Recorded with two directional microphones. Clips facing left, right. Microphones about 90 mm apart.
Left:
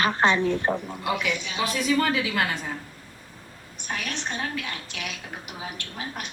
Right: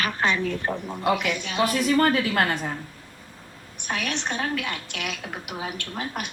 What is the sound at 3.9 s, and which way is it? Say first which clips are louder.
A woman's voice: right 3 dB; 65° right (ahead or behind).